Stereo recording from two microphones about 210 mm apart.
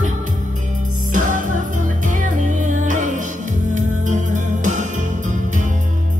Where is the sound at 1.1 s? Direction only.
40° right (ahead or behind).